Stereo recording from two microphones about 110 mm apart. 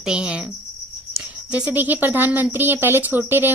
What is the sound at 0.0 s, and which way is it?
A woman's voice, 10° right (ahead or behind).